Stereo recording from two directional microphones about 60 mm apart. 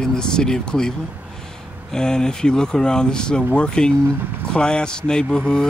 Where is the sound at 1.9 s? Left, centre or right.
Centre.